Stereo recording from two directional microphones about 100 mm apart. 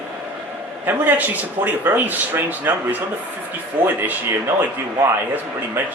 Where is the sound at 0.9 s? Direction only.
20° right (ahead or behind).